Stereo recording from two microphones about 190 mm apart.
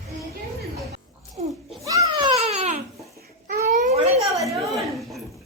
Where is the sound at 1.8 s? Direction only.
15° right (ahead or behind); by 4.2 s 35° right (ahead or behind).